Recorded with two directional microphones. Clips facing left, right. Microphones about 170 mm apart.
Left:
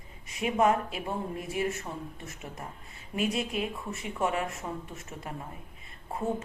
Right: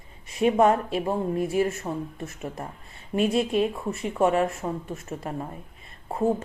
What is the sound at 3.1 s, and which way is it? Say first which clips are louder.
Speech: right 8 dB; 30° right (ahead or behind).